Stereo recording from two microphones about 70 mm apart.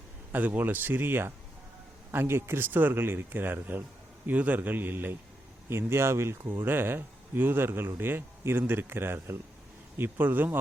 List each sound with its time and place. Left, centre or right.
0.3 s a man's voice: right